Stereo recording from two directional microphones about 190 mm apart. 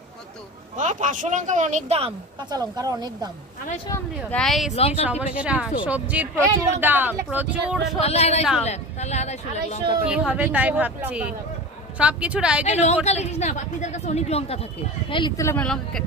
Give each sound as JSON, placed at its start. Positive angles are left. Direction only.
{"t": 0.8, "sound": "a woman's voice", "side_deg": -40}
{"t": 3.8, "sound": "speech", "side_deg": 15}
{"t": 4.4, "sound": "speech", "side_deg": 0}
{"t": 4.7, "sound": "a woman's voice", "side_deg": 35}
{"t": 5.0, "sound": "speech", "side_deg": -5}
{"t": 8.0, "sound": "a woman's voice", "side_deg": 35}
{"t": 10.1, "sound": "speech", "side_deg": -5}
{"t": 12.6, "sound": "a woman's voice", "side_deg": 35}
{"t": 15.1, "sound": "speech", "side_deg": 20}
{"t": 15.6, "sound": "speech", "side_deg": 0}